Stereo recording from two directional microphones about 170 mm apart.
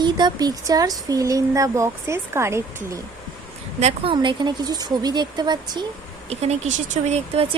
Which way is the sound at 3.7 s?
35° right (ahead or behind).